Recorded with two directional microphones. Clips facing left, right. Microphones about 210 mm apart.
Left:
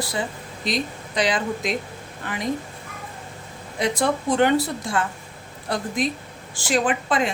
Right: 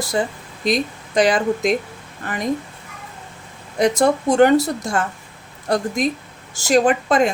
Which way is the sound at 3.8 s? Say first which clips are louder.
Right 6 dB; 45° right (ahead or behind).